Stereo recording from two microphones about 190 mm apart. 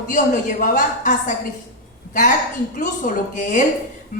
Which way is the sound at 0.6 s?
45° left (ahead or behind).